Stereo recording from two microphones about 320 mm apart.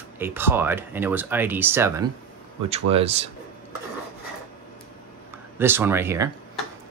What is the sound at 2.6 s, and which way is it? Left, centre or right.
Speech, centre.